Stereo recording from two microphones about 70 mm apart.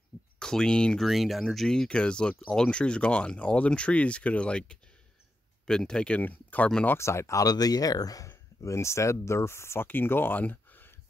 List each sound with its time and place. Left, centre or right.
0.4 s speech: centre
1.0 s speech: centre; by 6.7 s left
7.0 s speech: left
8.3 s speech: left